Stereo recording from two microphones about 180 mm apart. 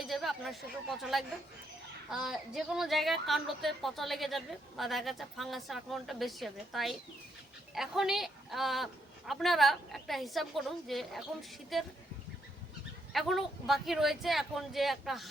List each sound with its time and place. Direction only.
0.0 s a woman's voice: centre (ahead or behind)
13.1 s a woman's voice: centre (ahead or behind)